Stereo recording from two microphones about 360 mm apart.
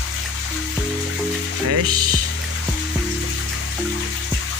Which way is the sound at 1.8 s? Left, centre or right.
Right.